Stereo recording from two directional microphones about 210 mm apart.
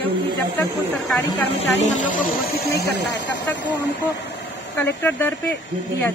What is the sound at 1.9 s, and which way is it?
Speech, 35° left (ahead or behind).